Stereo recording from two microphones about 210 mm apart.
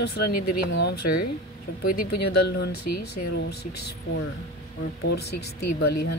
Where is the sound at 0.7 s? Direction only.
55° left (ahead or behind).